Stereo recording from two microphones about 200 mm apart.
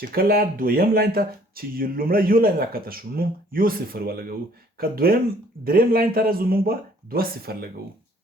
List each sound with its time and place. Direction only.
0.0 s speech: 50° right (ahead or behind)